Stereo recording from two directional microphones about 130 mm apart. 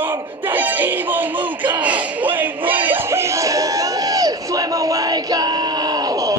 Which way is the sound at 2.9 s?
20° right (ahead or behind).